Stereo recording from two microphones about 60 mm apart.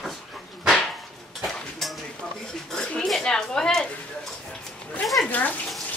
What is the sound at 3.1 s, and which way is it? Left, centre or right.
Speech, centre.